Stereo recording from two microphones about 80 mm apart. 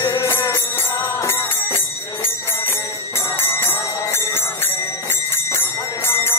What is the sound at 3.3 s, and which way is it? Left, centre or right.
Music, left.